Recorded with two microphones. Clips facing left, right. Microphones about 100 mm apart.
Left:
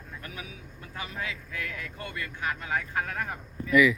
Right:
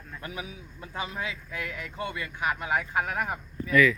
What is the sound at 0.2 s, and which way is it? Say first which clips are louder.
Speech: right 6 dB; 20° right (ahead or behind).